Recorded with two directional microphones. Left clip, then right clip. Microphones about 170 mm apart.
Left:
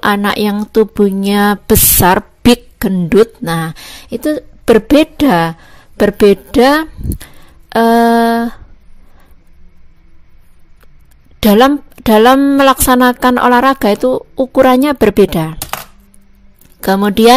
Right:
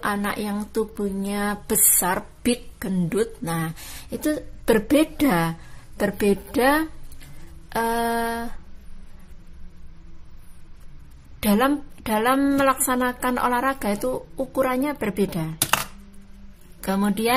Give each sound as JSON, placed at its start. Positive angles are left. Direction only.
{"t": 0.0, "sound": "speech", "side_deg": 50}
{"t": 11.3, "sound": "a woman's voice", "side_deg": 50}
{"t": 16.8, "sound": "speech", "side_deg": 50}